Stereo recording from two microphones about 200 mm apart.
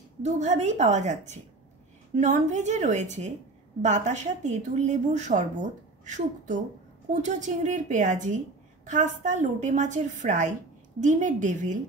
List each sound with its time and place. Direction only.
0.2 s a woman's voice: 35° right (ahead or behind)